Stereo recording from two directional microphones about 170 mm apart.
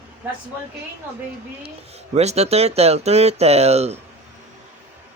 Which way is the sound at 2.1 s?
40° right (ahead or behind).